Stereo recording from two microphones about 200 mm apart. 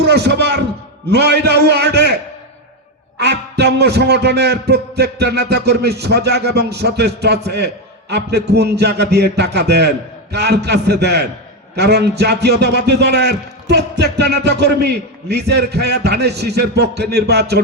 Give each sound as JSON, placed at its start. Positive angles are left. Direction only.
{"t": 0.0, "sound": "a sound", "side_deg": -55}
{"t": 1.1, "sound": "a man's voice", "side_deg": -55}
{"t": 3.2, "sound": "a man's voice", "side_deg": -55}